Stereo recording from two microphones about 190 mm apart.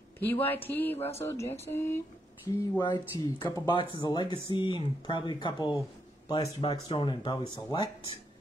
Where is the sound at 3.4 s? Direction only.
20° left (ahead or behind).